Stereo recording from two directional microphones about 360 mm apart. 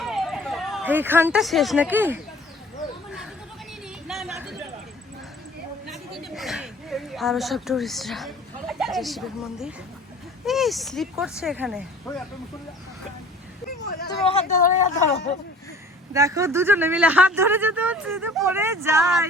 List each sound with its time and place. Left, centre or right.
0.0 s speech: centre
3.8 s a sound: centre
5.9 s a sound: centre
10.4 s speech: centre
14.1 s speech: centre
16.1 s speech: centre